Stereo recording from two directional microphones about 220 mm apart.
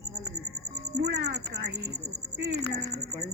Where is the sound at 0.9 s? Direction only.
45° right (ahead or behind).